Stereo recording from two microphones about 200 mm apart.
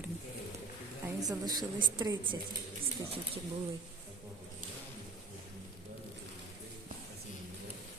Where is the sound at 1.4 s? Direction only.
20° right (ahead or behind).